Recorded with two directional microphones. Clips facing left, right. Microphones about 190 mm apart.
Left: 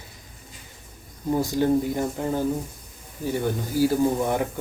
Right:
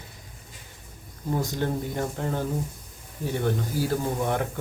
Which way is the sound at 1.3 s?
10° left (ahead or behind).